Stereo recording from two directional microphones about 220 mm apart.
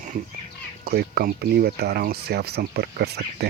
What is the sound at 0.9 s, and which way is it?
Speech, 45° right (ahead or behind).